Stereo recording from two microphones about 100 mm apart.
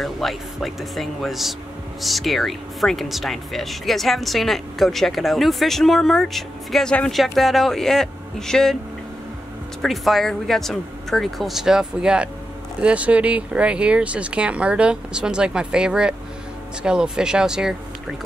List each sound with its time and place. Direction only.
0.0 s speech: centre (ahead or behind)
9.8 s speech: centre (ahead or behind)